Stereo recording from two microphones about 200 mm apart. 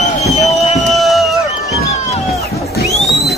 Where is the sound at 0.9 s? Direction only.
Centre (ahead or behind).